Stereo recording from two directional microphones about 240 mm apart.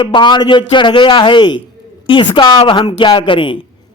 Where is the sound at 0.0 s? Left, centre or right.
Centre.